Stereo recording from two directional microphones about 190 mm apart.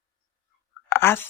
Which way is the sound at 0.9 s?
15° left (ahead or behind).